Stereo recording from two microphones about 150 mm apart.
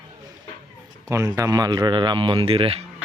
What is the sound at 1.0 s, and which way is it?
Speech, 25° right (ahead or behind).